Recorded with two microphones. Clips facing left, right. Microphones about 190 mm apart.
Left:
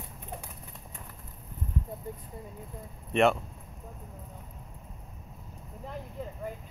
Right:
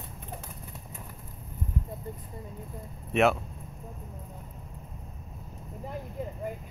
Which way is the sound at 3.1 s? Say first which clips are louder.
Even; 5° right (ahead or behind).